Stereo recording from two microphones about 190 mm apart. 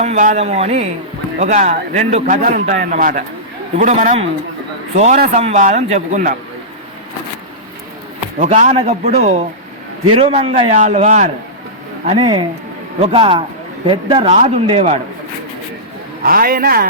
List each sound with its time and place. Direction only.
0.0 s a man's voice: 40° right (ahead or behind)
5.1 s a man's voice: 50° right (ahead or behind)
5.4 s a man's voice: 35° right (ahead or behind)
8.4 s a man's voice: 40° right (ahead or behind)
12.0 s a man's voice: 25° right (ahead or behind)
16.2 s a man's voice: 50° right (ahead or behind)